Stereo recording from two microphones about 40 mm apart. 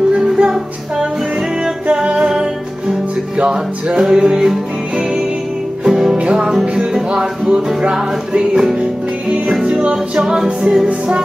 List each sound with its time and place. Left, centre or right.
0.1 s music: centre
3.3 s music: right
4.0 s music: centre
6.1 s music: right
6.4 s music: centre
10.1 s a capella: centre
10.9 s music: centre